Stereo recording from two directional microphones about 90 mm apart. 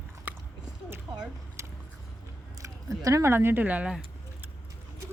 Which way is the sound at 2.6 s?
35° right (ahead or behind).